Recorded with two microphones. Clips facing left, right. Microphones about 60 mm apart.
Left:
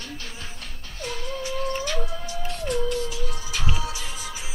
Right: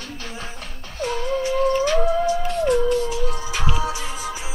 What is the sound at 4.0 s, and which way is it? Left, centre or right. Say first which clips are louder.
Music: right 6 dB; right.